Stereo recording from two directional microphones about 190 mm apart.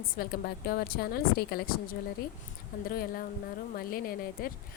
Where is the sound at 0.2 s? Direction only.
55° left (ahead or behind).